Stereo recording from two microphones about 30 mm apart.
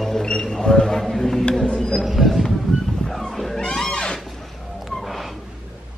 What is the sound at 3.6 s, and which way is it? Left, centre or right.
Music, left.